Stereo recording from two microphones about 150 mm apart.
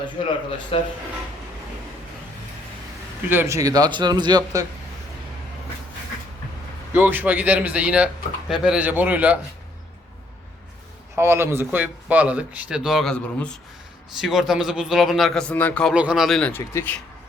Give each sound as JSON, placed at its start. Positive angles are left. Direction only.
{"t": 0.7, "sound": "speech", "side_deg": 40}
{"t": 3.2, "sound": "a man's voice", "side_deg": -15}
{"t": 6.9, "sound": "speech", "side_deg": -15}
{"t": 11.1, "sound": "a man's voice", "side_deg": -15}
{"t": 16.0, "sound": "a man's voice", "side_deg": -5}
{"t": 16.5, "sound": "speech", "side_deg": 15}